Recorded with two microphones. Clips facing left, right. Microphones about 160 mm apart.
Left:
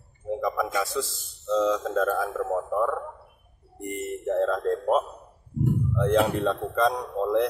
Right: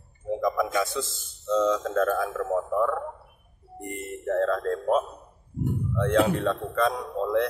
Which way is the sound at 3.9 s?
15° left (ahead or behind).